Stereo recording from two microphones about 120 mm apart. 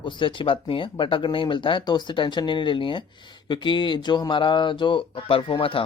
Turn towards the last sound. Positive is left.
turn(degrees=45)  # may be behind; listen again after turning